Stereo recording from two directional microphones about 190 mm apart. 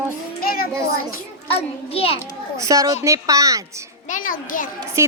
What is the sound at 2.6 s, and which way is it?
Speech, 15° right (ahead or behind).